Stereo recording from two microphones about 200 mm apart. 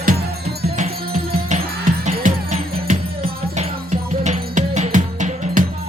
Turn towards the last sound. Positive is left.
turn(degrees=-40)  # may be behind; listen again after turning